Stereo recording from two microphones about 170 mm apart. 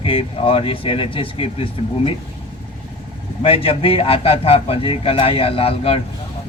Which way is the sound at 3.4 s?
35° left (ahead or behind).